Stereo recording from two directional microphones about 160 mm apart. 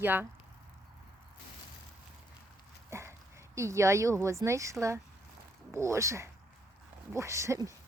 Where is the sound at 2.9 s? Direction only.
15° right (ahead or behind).